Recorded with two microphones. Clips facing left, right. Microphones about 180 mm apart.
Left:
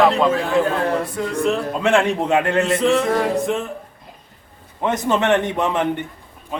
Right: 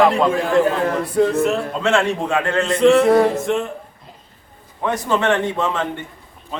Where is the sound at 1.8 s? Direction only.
15° left (ahead or behind).